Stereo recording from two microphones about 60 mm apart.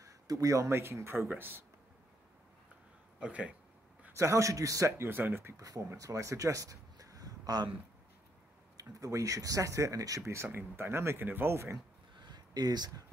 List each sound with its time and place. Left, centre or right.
0.0 s a sound: right
0.7 s speech: right
1.3 s speech: right
3.2 s speech: right
4.2 s a man's voice: right
4.9 s speech: right
5.6 s speech: right
5.9 s a sound: right
8.7 s speech: right
10.3 s speech: right
12.5 s speech: right